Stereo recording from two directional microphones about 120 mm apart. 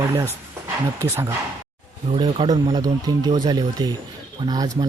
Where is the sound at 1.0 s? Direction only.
20° right (ahead or behind).